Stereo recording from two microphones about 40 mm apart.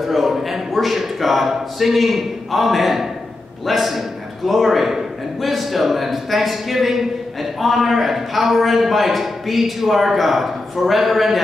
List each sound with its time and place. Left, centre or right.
0.1 s a man's voice: centre